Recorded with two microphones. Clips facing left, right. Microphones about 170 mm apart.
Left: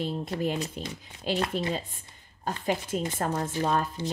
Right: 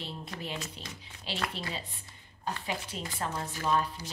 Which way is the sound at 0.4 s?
45° left (ahead or behind).